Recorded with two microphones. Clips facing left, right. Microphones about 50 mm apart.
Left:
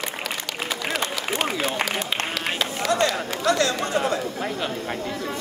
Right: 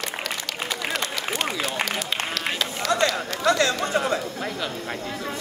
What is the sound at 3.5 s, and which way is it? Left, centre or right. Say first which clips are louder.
Chatter: right 1 dB; right.